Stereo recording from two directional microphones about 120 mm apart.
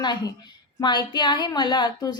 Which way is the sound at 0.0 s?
35° left (ahead or behind).